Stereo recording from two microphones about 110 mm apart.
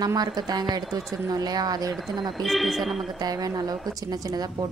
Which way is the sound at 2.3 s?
Centre (ahead or behind).